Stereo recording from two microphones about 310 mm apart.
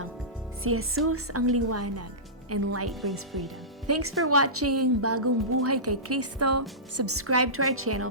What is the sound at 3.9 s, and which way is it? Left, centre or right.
A woman's voice, right.